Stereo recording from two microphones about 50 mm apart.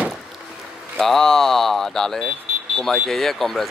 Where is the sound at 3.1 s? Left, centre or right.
Centre.